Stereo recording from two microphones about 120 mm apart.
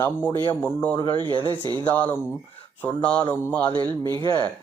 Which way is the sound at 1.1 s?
45° right (ahead or behind).